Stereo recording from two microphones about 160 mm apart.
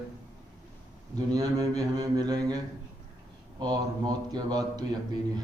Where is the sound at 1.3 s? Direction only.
20° right (ahead or behind).